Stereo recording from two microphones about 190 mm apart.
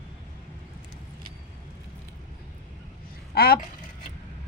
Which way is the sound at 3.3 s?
55° left (ahead or behind).